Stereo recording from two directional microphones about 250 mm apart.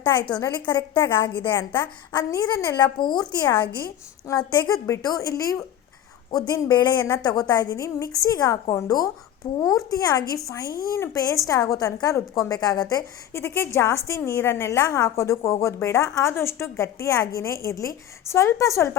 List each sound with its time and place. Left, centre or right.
0.0 s a woman's voice: centre
1.3 s a woman's voice: centre
3.7 s a woman's voice: left
4.3 s a woman's voice: centre